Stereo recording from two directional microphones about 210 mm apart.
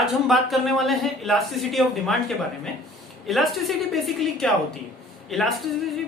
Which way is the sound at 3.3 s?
Centre (ahead or behind).